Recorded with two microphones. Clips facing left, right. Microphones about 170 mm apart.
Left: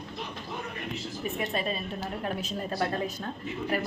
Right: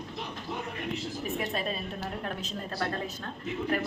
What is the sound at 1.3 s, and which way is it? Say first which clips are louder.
A woman's voice: left 2 dB; centre (ahead or behind).